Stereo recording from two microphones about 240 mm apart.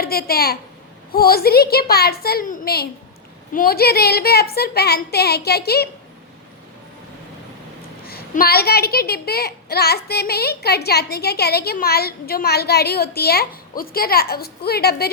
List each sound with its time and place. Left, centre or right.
0.0 s a child's voice: left
8.0 s a child's voice: left